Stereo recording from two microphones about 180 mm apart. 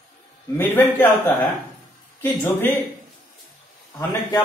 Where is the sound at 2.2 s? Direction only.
10° left (ahead or behind).